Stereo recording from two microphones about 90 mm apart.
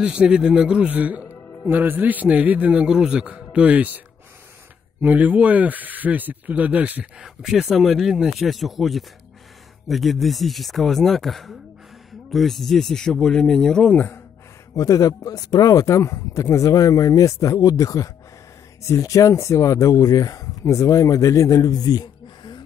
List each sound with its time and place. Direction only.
0.0 s a man's voice: 10° right (ahead or behind)
5.0 s a man's voice: 20° right (ahead or behind)
7.2 s speech: 5° right (ahead or behind)
14.8 s speech: 40° left (ahead or behind)